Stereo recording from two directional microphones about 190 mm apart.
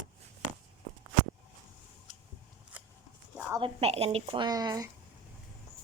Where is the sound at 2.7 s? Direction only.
10° right (ahead or behind).